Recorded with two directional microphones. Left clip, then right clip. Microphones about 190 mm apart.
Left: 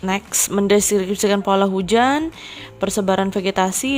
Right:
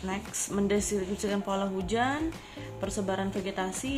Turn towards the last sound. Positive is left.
turn(degrees=55)  # may be behind; listen again after turning